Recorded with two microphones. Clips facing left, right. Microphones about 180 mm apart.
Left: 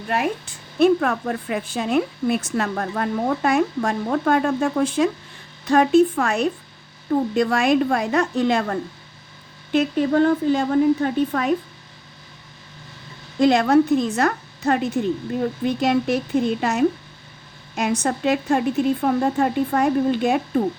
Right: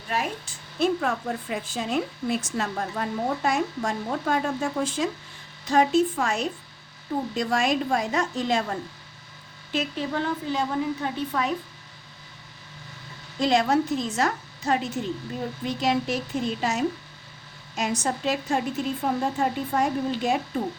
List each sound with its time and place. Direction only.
0.1 s a woman's voice: 60° left (ahead or behind)
9.7 s a woman's voice: 50° left (ahead or behind)
13.4 s a woman's voice: 55° left (ahead or behind)